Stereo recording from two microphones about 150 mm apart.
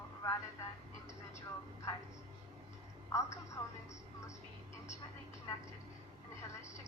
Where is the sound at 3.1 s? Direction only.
20° left (ahead or behind).